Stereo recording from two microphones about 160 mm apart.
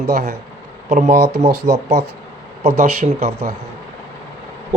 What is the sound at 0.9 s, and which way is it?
A man's voice, 45° right (ahead or behind).